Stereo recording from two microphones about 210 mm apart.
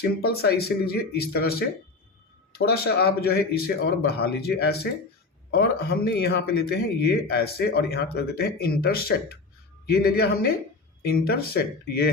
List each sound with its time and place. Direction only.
0.0 s speech: 50° left (ahead or behind)
2.6 s speech: 50° left (ahead or behind)